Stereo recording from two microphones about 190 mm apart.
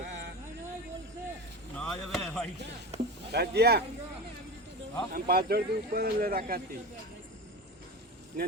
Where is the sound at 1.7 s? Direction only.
5° left (ahead or behind).